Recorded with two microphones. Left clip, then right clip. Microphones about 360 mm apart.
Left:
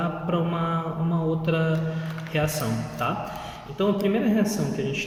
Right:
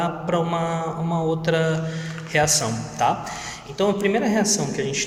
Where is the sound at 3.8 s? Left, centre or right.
Centre.